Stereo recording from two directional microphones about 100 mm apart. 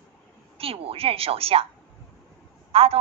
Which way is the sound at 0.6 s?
75° right (ahead or behind).